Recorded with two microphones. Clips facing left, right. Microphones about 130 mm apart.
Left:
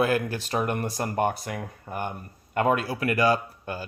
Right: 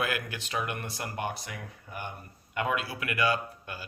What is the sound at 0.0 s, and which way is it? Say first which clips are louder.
Speech: left 8 dB; 35° left (ahead or behind).